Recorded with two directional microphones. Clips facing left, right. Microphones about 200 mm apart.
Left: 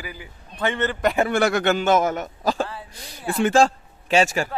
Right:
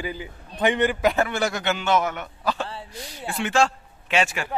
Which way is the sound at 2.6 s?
30° right (ahead or behind).